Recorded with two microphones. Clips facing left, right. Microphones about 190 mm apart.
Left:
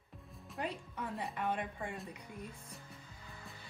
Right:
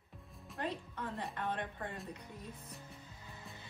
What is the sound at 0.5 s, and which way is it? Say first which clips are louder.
Speech: even; 5° left (ahead or behind).